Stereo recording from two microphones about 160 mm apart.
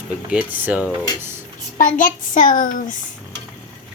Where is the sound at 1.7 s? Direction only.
55° left (ahead or behind).